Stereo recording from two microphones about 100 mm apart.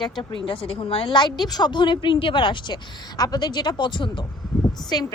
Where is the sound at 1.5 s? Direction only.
45° left (ahead or behind).